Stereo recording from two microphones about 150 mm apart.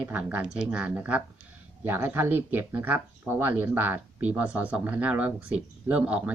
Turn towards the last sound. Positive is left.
turn(degrees=-10)  # may be behind; listen again after turning